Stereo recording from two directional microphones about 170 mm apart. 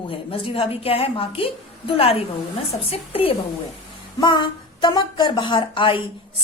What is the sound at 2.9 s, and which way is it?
A woman's voice, 35° left (ahead or behind).